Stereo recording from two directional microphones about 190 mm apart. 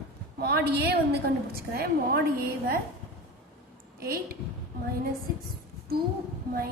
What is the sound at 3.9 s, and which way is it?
Speech, 55° right (ahead or behind).